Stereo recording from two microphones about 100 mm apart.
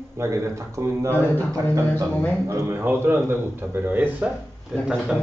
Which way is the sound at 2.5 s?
25° right (ahead or behind).